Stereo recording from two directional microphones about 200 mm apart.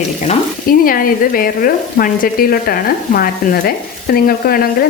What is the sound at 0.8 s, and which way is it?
Frying, 45° left (ahead or behind).